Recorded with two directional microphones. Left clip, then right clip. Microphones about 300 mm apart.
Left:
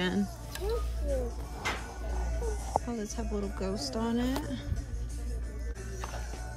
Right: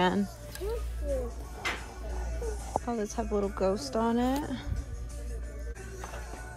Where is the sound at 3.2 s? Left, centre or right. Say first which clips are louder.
Right 7 dB; centre.